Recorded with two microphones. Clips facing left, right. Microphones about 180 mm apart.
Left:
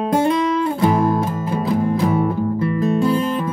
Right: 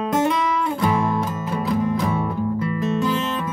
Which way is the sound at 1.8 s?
30° left (ahead or behind).